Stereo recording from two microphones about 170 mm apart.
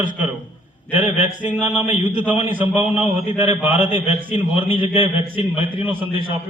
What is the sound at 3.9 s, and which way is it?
A man's voice, 30° right (ahead or behind).